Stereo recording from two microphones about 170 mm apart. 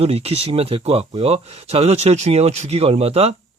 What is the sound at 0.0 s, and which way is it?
Speech, 35° right (ahead or behind).